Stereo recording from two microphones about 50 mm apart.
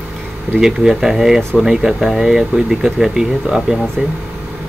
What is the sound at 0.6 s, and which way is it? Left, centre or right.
Speech, centre.